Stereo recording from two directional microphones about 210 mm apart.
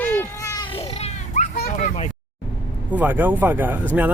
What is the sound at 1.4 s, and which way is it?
Children playing, 35° left (ahead or behind).